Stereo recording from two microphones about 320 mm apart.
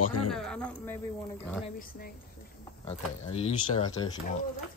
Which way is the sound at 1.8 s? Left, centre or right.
Left.